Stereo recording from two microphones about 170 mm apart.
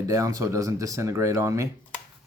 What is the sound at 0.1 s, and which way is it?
Speech, 20° right (ahead or behind).